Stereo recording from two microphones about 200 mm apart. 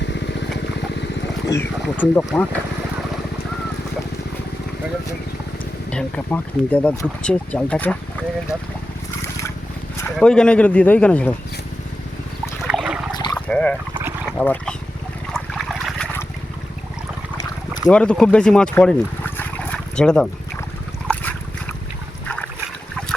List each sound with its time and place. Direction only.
0.0 s vehicle: 60° left (ahead or behind)
1.5 s speech: 10° left (ahead or behind)
5.9 s speech: 5° left (ahead or behind)
10.2 s speech: 5° left (ahead or behind)
12.6 s a sound: 5° right (ahead or behind)
13.1 s dog: 20° left (ahead or behind)
13.5 s dog: 5° left (ahead or behind)
15.3 s a sound: centre (ahead or behind)
17.8 s speech: 5° left (ahead or behind)